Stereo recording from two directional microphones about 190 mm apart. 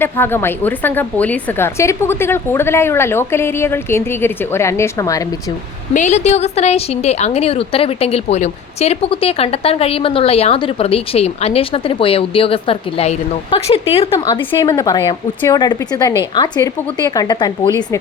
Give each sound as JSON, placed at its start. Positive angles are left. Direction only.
{"t": 0.0, "sound": "a woman's voice", "side_deg": 10}
{"t": 5.9, "sound": "a woman's voice", "side_deg": 40}